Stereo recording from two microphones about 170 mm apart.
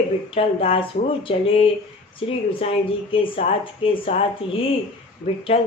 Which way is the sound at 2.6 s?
35° left (ahead or behind).